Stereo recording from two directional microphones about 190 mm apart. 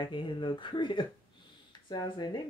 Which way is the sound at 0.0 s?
25° left (ahead or behind).